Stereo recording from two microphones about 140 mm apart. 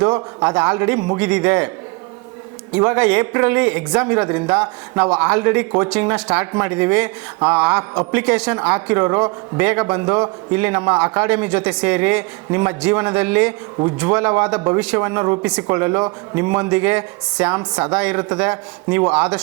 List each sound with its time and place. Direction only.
0.0 s a man's voice: 25° right (ahead or behind)
0.4 s speech: 10° right (ahead or behind)
2.7 s speech: 10° right (ahead or behind)